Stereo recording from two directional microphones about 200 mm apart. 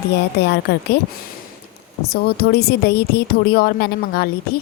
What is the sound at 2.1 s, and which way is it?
Speech, 50° left (ahead or behind).